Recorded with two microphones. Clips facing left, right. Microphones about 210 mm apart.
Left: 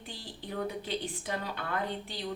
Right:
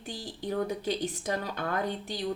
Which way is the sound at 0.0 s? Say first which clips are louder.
Right 7 dB; 45° right (ahead or behind).